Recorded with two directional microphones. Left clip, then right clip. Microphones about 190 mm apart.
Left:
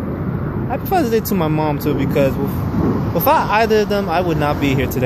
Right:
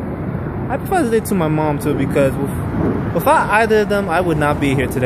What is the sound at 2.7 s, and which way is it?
Speech, 45° left (ahead or behind).